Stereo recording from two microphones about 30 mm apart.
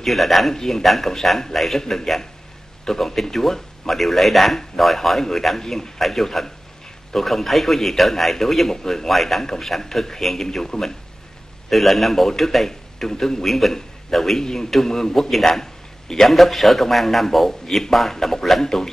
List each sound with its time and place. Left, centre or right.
0.0 s a man's voice: centre
0.6 s a man's voice: centre
1.8 s a man's voice: left; by 5.6 s centre
5.6 s a man's voice: centre
5.9 s a man's voice: centre
11.7 s a man's voice: centre
14.4 s a man's voice: left